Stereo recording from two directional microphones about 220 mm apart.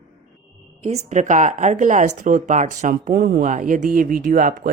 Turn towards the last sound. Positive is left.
turn(degrees=-40)  # may be behind; listen again after turning